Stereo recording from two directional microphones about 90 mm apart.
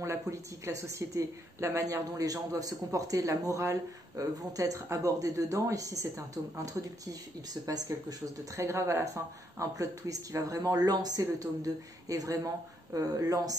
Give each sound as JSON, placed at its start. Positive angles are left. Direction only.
{"t": 0.0, "sound": "speech", "side_deg": -35}